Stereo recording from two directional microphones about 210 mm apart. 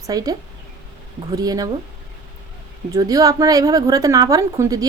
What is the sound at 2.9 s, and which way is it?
A woman's voice, 15° right (ahead or behind).